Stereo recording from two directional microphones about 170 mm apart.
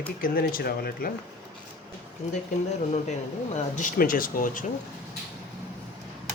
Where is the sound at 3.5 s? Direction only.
50° left (ahead or behind).